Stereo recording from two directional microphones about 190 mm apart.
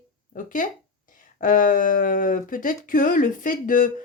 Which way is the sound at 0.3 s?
45° left (ahead or behind).